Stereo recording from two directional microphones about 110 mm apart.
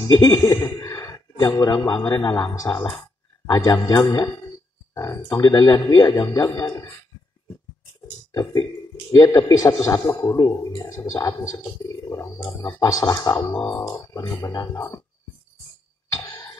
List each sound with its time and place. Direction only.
0.1 s a man's voice: 30° left (ahead or behind)
5.3 s a man's voice: 40° left (ahead or behind)
8.3 s a man's voice: 30° left (ahead or behind)
16.1 s cough: 30° left (ahead or behind)